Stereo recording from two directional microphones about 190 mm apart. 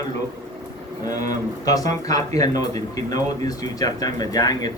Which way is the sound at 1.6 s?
20° left (ahead or behind).